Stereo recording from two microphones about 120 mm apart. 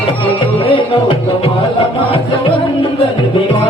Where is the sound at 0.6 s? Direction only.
45° left (ahead or behind).